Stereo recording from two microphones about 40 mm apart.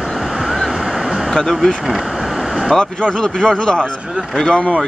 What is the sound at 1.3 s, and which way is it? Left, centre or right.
Speech, centre.